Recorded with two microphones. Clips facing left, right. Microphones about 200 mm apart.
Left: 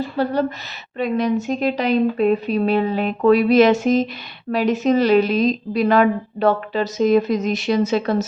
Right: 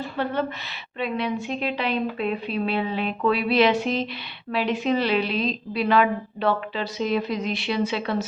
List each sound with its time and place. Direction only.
0.2 s a woman's voice: 40° left (ahead or behind)